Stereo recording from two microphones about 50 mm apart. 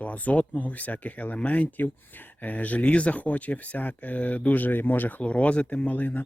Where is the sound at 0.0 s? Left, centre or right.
Left.